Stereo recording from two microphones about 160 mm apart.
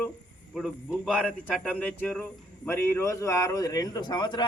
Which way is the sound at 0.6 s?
Centre (ahead or behind).